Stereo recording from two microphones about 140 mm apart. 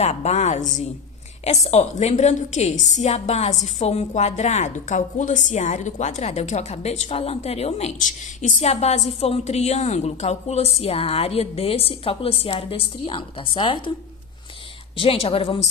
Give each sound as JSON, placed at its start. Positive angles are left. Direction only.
{"t": 0.0, "sound": "a woman's voice", "side_deg": 50}
{"t": 14.9, "sound": "a woman's voice", "side_deg": 45}